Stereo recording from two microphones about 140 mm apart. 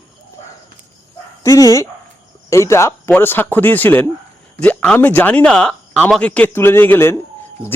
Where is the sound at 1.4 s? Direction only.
25° left (ahead or behind).